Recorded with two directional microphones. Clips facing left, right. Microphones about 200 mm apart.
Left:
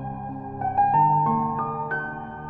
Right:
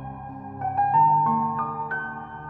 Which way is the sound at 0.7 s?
25° left (ahead or behind).